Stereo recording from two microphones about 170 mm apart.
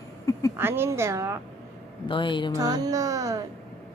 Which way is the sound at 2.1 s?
30° left (ahead or behind).